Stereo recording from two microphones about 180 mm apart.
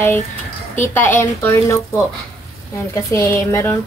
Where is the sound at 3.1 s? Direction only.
15° left (ahead or behind).